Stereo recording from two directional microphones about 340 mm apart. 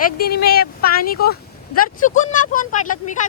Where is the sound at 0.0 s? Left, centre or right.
Left.